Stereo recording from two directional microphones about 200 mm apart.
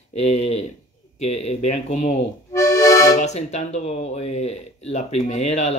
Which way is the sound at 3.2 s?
35° left (ahead or behind).